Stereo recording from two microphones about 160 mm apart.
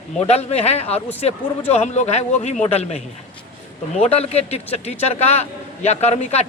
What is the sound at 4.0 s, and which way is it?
A man's voice, 40° left (ahead or behind).